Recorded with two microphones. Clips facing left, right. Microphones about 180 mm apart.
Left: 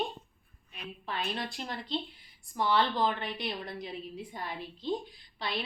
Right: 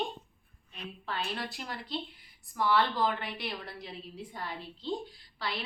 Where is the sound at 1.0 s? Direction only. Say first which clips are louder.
Left 1 dB; 20° left (ahead or behind).